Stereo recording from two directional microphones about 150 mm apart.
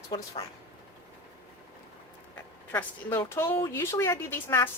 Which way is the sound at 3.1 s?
15° left (ahead or behind).